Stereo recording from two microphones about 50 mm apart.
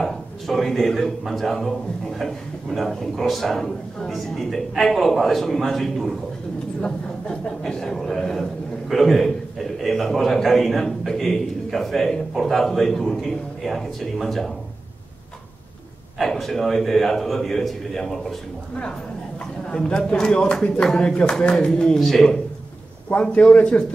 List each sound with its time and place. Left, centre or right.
0.0 s a man's voice: centre
6.8 s a man's voice: centre
16.2 s a man's voice: centre
19.7 s a man's voice: centre
23.3 s a man's voice: left